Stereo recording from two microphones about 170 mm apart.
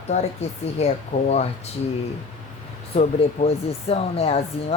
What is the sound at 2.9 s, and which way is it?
Speech, 40° left (ahead or behind).